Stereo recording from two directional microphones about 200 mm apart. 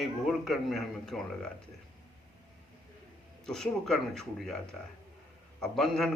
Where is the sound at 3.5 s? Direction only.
Centre (ahead or behind).